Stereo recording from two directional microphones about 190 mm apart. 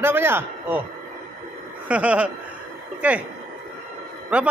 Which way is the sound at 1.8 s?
5° right (ahead or behind).